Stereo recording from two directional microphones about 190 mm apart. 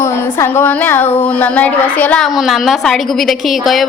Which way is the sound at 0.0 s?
15° left (ahead or behind).